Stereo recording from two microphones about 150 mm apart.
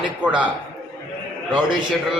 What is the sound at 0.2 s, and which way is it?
Speech, 10° right (ahead or behind).